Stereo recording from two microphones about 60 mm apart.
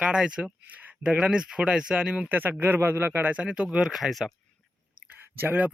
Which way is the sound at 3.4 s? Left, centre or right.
Centre.